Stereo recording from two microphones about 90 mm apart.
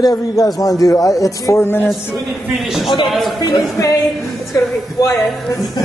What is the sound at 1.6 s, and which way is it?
Speech, 25° left (ahead or behind).